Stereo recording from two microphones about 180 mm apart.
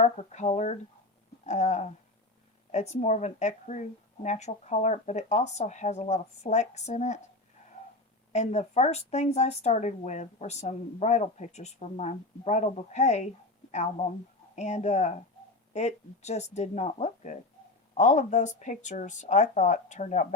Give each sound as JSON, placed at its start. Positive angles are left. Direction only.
{"t": 0.0, "sound": "speech", "side_deg": 40}
{"t": 8.3, "sound": "speech", "side_deg": 40}